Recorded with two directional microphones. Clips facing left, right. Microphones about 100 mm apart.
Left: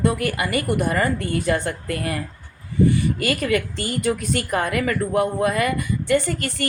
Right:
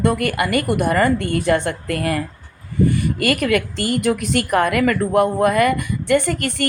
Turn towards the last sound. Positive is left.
turn(degrees=-60)  # may be behind; listen again after turning